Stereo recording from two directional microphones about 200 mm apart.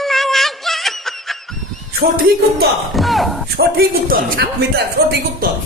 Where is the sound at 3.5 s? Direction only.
50° right (ahead or behind).